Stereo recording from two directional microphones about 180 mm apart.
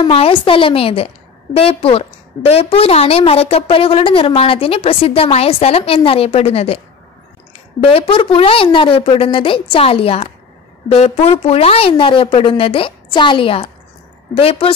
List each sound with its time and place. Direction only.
0.0 s a woman's voice: 30° left (ahead or behind)
7.8 s a woman's voice: 30° left (ahead or behind)